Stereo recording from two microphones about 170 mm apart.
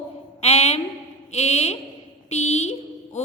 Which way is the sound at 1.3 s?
40° left (ahead or behind).